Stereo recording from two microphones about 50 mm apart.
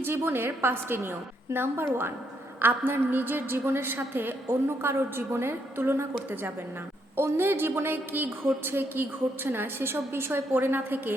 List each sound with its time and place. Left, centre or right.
0.0 s a woman's voice: right
7.2 s a woman's voice: right